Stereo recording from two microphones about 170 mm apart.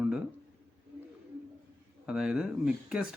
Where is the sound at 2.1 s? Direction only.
5° right (ahead or behind).